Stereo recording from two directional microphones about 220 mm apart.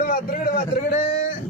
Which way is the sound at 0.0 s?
40° left (ahead or behind).